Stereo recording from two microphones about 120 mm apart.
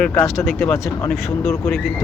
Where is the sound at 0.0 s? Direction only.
15° left (ahead or behind).